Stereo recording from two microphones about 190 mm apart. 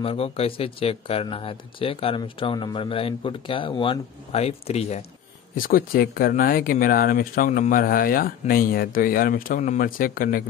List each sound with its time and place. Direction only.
0.0 s speech: 30° left (ahead or behind)
5.6 s speech: 50° left (ahead or behind)